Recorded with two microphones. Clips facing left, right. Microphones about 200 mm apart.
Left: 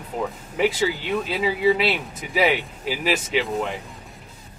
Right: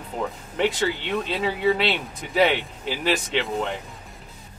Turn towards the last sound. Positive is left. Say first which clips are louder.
# left 2 dB
turn(degrees=5)  # may be behind; listen again after turning